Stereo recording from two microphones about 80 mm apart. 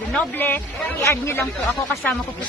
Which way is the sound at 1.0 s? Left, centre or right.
Left.